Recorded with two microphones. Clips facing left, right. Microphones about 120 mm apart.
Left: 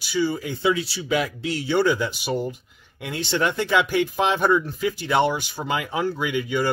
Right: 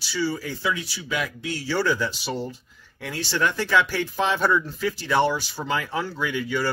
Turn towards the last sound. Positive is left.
turn(degrees=15)  # may be behind; listen again after turning